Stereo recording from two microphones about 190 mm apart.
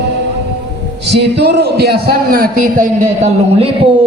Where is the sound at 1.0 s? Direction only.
65° right (ahead or behind); by 3.7 s 35° right (ahead or behind).